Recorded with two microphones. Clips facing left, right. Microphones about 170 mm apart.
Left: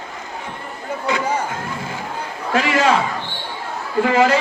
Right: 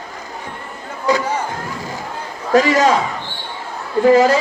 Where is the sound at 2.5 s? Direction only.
40° right (ahead or behind).